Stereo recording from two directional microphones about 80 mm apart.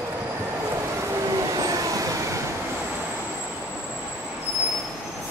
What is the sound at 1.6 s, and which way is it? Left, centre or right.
Vehicle, right.